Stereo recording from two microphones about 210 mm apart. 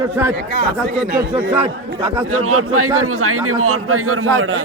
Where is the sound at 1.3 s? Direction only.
20° right (ahead or behind).